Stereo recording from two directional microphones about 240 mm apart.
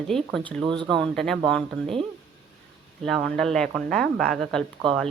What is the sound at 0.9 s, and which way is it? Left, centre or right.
Speech, centre.